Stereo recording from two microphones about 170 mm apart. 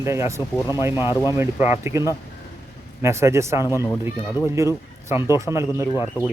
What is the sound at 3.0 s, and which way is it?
Speech, 15° right (ahead or behind).